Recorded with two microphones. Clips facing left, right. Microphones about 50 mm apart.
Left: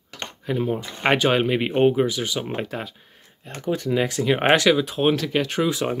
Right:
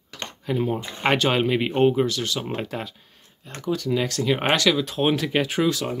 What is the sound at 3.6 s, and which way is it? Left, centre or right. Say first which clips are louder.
Speech: left 2 dB; left.